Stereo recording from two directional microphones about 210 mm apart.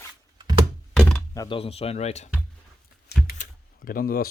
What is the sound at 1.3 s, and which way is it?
Speech, 20° left (ahead or behind).